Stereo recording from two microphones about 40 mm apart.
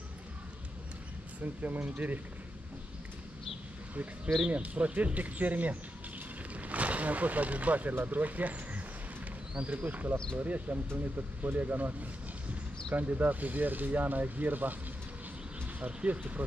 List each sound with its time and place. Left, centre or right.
1.4 s speech: right
4.5 s speech: right
6.5 s a sound: right
7.9 s speech: right
12.9 s speech: right
15.8 s speech: right